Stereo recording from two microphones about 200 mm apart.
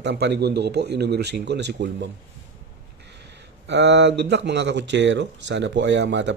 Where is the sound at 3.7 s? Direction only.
60° right (ahead or behind).